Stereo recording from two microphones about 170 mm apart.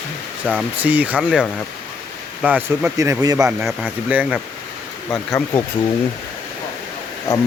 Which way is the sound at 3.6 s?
5° right (ahead or behind).